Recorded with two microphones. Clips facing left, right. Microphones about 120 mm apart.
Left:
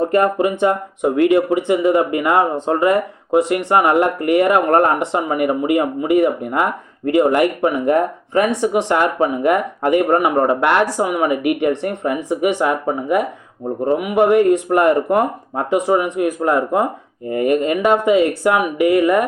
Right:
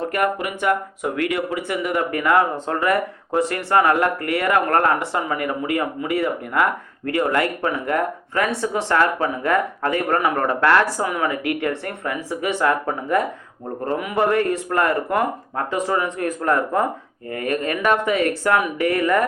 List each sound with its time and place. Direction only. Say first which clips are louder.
0.1 s speech: left 7 dB; 25° left (ahead or behind)